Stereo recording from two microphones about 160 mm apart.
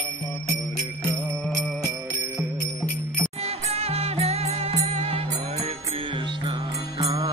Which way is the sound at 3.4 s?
40° right (ahead or behind).